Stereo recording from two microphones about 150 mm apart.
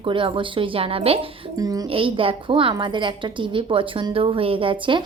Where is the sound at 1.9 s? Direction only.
35° right (ahead or behind).